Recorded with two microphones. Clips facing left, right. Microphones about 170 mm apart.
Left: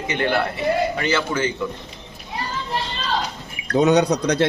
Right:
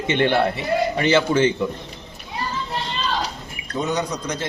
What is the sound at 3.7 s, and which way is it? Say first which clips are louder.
Speech: left 8 dB; 70° left (ahead or behind).